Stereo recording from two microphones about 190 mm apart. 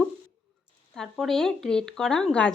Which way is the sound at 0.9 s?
Centre (ahead or behind).